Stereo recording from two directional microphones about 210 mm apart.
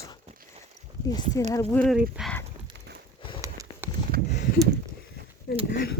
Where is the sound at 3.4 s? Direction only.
15° right (ahead or behind).